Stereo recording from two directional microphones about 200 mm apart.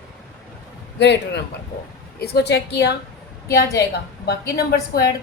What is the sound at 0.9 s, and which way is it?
A woman's voice, 60° left (ahead or behind).